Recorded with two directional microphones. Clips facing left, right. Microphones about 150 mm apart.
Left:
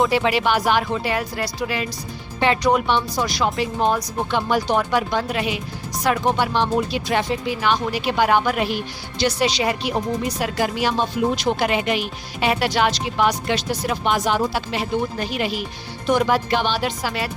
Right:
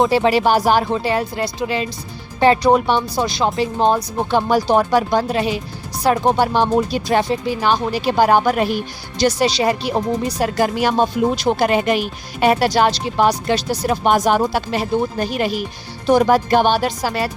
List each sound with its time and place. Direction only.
0.0 s speech: 35° right (ahead or behind)
2.4 s speech: 35° right (ahead or behind)
3.2 s speech: 30° right (ahead or behind)